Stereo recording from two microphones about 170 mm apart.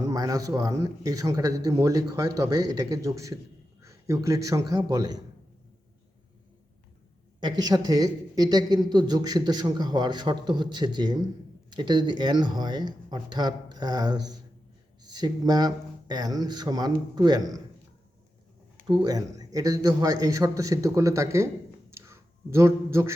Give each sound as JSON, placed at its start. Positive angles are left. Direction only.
{"t": 0.0, "sound": "a man's voice", "side_deg": -20}
{"t": 7.3, "sound": "a man's voice", "side_deg": -25}
{"t": 18.9, "sound": "a man's voice", "side_deg": -25}